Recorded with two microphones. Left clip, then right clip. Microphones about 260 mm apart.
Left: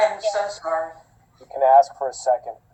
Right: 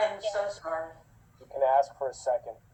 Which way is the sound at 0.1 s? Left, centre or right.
Left.